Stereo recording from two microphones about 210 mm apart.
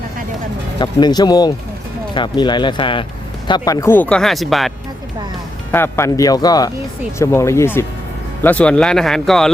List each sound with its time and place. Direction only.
0.8 s speech: 20° left (ahead or behind); by 4.7 s centre (ahead or behind)
5.7 s speech: 10° left (ahead or behind)